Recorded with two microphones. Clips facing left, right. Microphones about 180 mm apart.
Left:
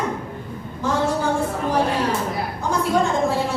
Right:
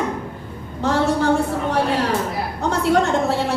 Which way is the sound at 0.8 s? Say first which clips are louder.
Right 3 dB; 65° right (ahead or behind).